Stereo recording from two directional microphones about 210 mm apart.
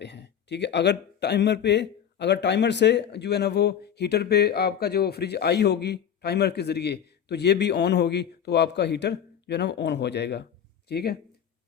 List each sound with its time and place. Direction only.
0.0 s speech: 55° left (ahead or behind)